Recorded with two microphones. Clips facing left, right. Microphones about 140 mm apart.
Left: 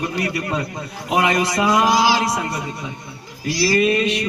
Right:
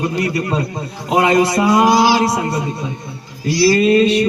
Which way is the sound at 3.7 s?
30° right (ahead or behind).